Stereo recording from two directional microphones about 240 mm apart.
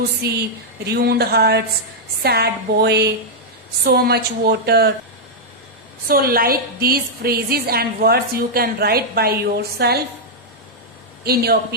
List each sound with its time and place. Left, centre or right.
0.2 s a woman's voice: right
6.1 s a woman's voice: right
11.2 s speech: right